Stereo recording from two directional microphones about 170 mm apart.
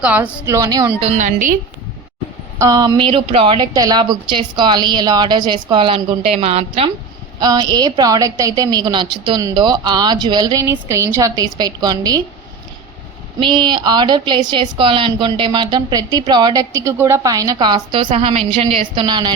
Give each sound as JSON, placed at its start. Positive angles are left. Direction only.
{"t": 0.0, "sound": "a woman's voice", "side_deg": -10}
{"t": 0.9, "sound": "a woman's voice", "side_deg": -40}
{"t": 2.6, "sound": "a woman's voice", "side_deg": -20}
{"t": 7.3, "sound": "a woman's voice", "side_deg": -25}
{"t": 13.4, "sound": "a woman's voice", "side_deg": -25}
{"t": 18.1, "sound": "a woman's voice", "side_deg": -35}